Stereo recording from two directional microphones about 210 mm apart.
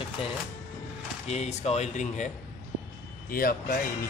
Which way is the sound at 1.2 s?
30° left (ahead or behind).